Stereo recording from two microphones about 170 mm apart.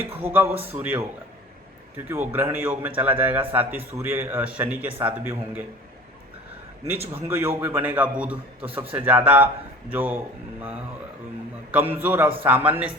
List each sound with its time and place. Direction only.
0.0 s a man's voice: 10° right (ahead or behind)
2.0 s a man's voice: 10° right (ahead or behind)
6.8 s a man's voice: 10° right (ahead or behind)
11.7 s a man's voice: 10° right (ahead or behind)